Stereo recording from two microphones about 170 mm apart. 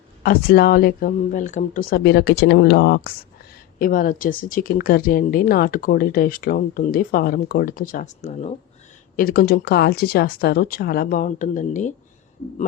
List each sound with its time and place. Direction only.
0.2 s speech: 60° left (ahead or behind)
3.8 s speech: 55° left (ahead or behind)
9.1 s speech: 60° left (ahead or behind)